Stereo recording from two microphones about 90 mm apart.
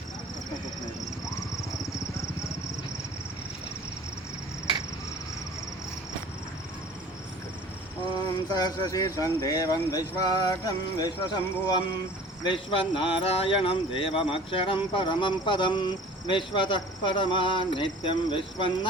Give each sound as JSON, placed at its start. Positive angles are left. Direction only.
{"t": 8.4, "sound": "speech", "side_deg": 50}
{"t": 12.4, "sound": "speech", "side_deg": 80}
{"t": 14.9, "sound": "speech", "side_deg": 65}